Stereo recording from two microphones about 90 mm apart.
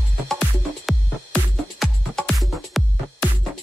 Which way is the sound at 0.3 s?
5° left (ahead or behind).